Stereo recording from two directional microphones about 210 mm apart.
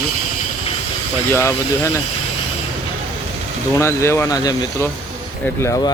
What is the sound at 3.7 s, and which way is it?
Speech, 15° left (ahead or behind).